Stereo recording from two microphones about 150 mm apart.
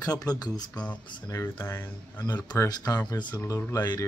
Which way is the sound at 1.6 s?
15° left (ahead or behind).